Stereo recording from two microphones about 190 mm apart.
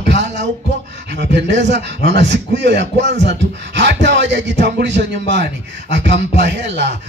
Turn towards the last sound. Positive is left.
turn(degrees=-65)  # may be behind; listen again after turning